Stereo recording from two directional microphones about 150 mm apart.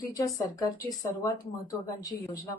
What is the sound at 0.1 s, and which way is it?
Speech, 25° left (ahead or behind).